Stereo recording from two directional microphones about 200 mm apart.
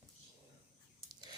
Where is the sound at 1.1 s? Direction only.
20° right (ahead or behind).